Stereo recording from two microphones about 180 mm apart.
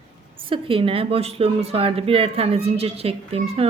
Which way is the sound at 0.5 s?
30° right (ahead or behind).